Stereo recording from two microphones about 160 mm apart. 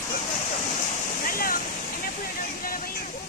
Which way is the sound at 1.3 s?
65° left (ahead or behind).